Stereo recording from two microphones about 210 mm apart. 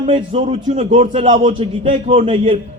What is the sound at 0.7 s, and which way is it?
A man's voice, 35° right (ahead or behind).